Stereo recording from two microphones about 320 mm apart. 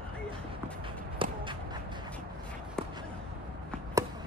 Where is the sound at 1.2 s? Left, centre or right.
Centre.